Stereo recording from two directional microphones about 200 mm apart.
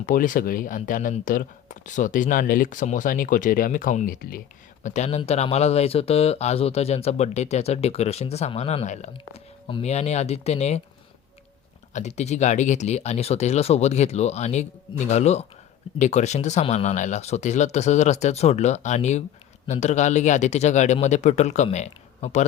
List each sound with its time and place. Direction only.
0.0 s speech: 40° left (ahead or behind)
11.9 s speech: 35° left (ahead or behind)